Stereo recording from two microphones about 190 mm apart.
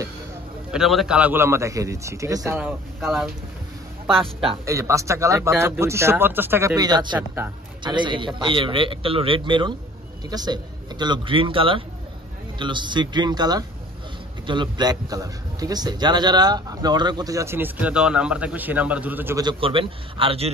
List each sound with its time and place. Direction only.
0.7 s a man's voice: centre (ahead or behind)
4.6 s a man's voice: 15° right (ahead or behind)
7.2 s a man's voice: 10° right (ahead or behind)
7.8 s a man's voice: 25° right (ahead or behind)
19.4 s a man's voice: 30° right (ahead or behind)